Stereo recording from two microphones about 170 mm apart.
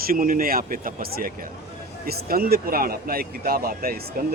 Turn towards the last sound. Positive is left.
turn(degrees=-60)  # may be behind; listen again after turning